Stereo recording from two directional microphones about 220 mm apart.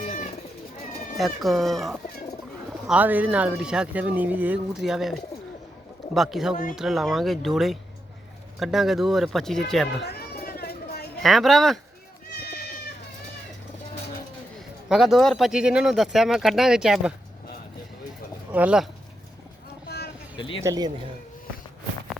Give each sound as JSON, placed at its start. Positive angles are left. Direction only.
{"t": 0.0, "sound": "pigeon", "side_deg": 30}
{"t": 1.4, "sound": "speech", "side_deg": 0}
{"t": 10.0, "sound": "a sound", "side_deg": 45}
{"t": 11.2, "sound": "speech", "side_deg": 0}
{"t": 12.3, "sound": "goat", "side_deg": 45}
{"t": 14.8, "sound": "speech", "side_deg": 0}
{"t": 18.5, "sound": "speech", "side_deg": -5}
{"t": 20.3, "sound": "speech", "side_deg": 20}
{"t": 20.7, "sound": "speech", "side_deg": -15}